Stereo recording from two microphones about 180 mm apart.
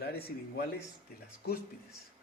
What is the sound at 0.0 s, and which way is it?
Speech, 65° left (ahead or behind).